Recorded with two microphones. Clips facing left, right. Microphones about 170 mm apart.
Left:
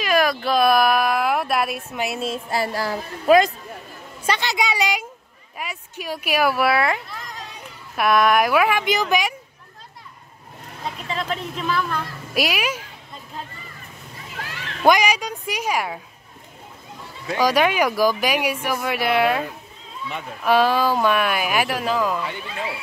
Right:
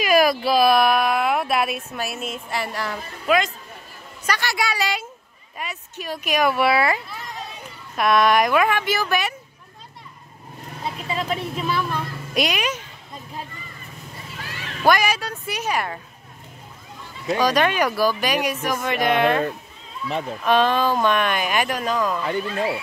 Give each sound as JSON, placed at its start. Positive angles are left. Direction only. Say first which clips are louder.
{"t": 0.0, "sound": "speech", "louder": "right 2 dB", "side_deg": -10}
{"t": 2.1, "sound": "a woman's voice", "louder": "left 4 dB", "side_deg": 30}
{"t": 4.3, "sound": "a woman's voice", "louder": "left 2 dB", "side_deg": 20}
{"t": 11.1, "sound": "speech", "louder": "right 1 dB", "side_deg": -10}
{"t": 12.4, "sound": "speech", "louder": "even", "side_deg": 5}
{"t": 14.8, "sound": "speech", "louder": "left 2 dB", "side_deg": 15}
{"t": 17.4, "sound": "speech", "louder": "left 2 dB", "side_deg": 10}
{"t": 20.1, "sound": "speech", "louder": "right 6 dB", "side_deg": -35}
{"t": 20.4, "sound": "speech", "louder": "left 1 dB", "side_deg": 10}
{"t": 22.2, "sound": "speech", "louder": "right 6 dB", "side_deg": -45}